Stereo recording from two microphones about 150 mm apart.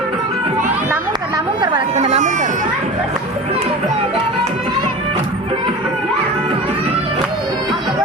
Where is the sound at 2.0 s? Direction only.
50° right (ahead or behind).